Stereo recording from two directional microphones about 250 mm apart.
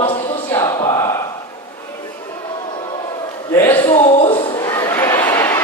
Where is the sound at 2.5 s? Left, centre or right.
Centre.